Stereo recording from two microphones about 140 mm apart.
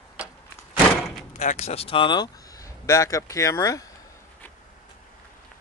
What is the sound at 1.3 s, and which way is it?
Speech, 60° left (ahead or behind).